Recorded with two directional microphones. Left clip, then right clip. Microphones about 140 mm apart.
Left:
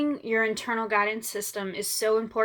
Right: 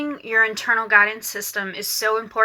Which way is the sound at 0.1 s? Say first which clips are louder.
Right 7 dB; 45° left (ahead or behind).